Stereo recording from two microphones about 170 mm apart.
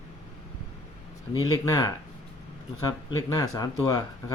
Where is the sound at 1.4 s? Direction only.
20° left (ahead or behind).